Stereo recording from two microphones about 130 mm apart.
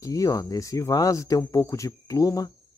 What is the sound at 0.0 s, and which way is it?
Speech, 25° left (ahead or behind).